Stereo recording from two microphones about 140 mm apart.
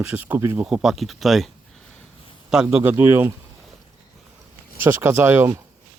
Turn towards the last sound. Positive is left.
turn(degrees=-20)  # may be behind; listen again after turning